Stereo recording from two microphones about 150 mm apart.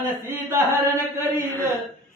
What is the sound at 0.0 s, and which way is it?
Chant, 15° right (ahead or behind).